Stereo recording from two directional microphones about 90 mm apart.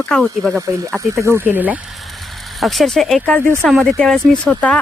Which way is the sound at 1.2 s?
25° right (ahead or behind).